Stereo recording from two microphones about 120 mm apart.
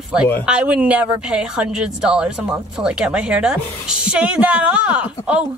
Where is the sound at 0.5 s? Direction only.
10° right (ahead or behind).